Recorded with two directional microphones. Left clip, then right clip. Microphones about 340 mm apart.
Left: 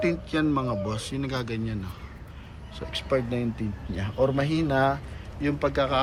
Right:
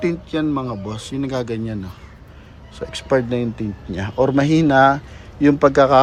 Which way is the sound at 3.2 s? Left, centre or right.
Right.